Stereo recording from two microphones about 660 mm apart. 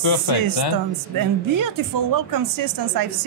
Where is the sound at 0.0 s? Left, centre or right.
Left.